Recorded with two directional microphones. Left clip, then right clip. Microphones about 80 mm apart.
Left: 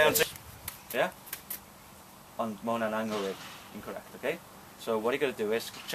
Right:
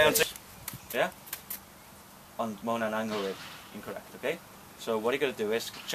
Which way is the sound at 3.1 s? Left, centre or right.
Left.